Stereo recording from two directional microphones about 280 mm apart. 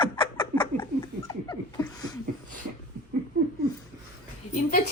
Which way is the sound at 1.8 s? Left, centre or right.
Centre.